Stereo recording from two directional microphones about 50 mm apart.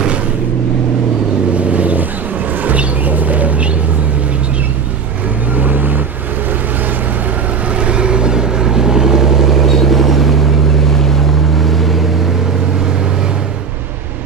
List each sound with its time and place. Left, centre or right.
1.6 s vehicle: right
2.6 s a sound: right
5.6 s vehicle: right
7.8 s vehicle: centre
9.7 s vehicle: centre
11.6 s vehicle: centre